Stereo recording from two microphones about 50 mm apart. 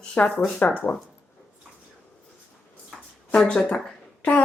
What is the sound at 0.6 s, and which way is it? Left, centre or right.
Speech, left.